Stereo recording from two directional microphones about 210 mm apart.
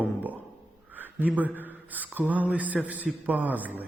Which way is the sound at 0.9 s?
10° right (ahead or behind).